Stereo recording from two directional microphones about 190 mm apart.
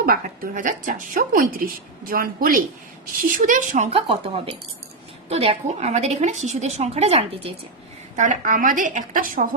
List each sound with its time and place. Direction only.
0.0 s a woman's voice: 45° right (ahead or behind)
5.3 s a woman's voice: 30° right (ahead or behind)
8.1 s a woman's voice: 40° right (ahead or behind)